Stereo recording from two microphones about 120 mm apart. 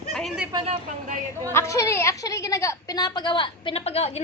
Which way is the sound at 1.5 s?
25° left (ahead or behind).